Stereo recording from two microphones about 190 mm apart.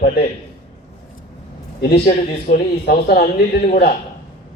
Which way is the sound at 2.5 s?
55° left (ahead or behind).